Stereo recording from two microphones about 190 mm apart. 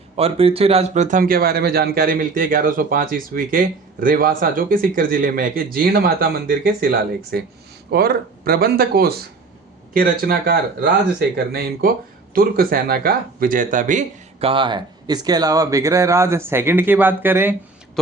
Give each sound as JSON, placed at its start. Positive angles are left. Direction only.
{"t": 0.2, "sound": "speech", "side_deg": -30}